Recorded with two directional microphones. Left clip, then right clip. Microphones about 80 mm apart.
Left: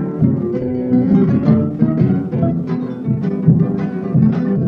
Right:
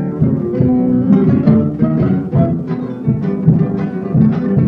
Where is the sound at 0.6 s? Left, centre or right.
Right.